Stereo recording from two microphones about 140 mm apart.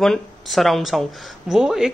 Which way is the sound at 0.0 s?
Centre (ahead or behind).